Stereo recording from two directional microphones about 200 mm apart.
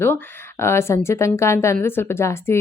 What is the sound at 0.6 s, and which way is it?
Speech, 15° left (ahead or behind).